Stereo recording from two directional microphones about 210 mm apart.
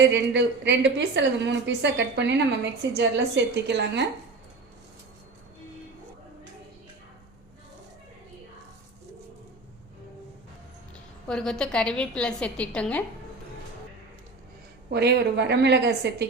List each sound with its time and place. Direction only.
0.0 s a woman's voice: 55° right (ahead or behind)
11.3 s a woman's voice: 5° left (ahead or behind)
14.8 s a woman's voice: 50° right (ahead or behind)